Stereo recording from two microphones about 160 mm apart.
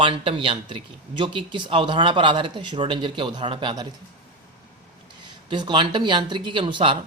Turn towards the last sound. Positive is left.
turn(degrees=-30)  # may be behind; listen again after turning